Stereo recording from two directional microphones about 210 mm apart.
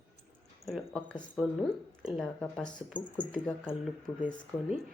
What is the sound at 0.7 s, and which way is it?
Speech, centre (ahead or behind).